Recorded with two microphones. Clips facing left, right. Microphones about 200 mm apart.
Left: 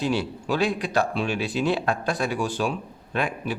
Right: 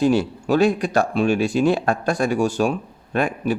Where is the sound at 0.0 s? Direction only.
45° right (ahead or behind).